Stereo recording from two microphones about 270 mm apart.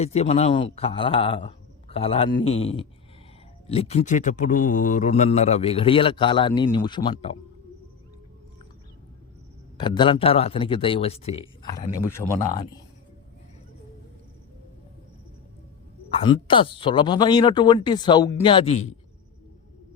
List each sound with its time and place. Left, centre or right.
0.0 s speech: left
9.7 s speech: centre
16.1 s speech: centre